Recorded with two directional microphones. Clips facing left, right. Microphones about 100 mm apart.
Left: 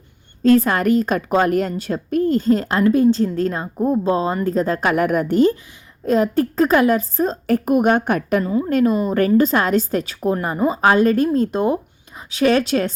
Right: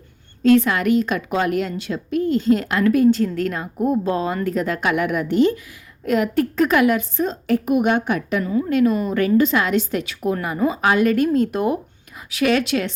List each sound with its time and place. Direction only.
0.4 s a woman's voice: 40° left (ahead or behind)
8.7 s a woman's voice: 35° left (ahead or behind)